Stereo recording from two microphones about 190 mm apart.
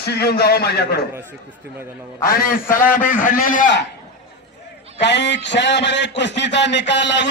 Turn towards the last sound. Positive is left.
turn(degrees=70)  # may be behind; listen again after turning